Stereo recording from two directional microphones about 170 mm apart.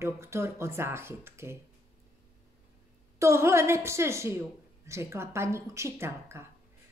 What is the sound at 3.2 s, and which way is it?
Speech, 15° right (ahead or behind).